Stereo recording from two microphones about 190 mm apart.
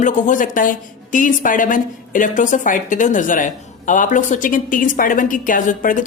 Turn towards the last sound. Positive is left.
turn(degrees=45)  # may be behind; listen again after turning